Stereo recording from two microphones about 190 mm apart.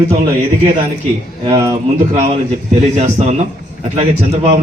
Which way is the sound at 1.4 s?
30° right (ahead or behind).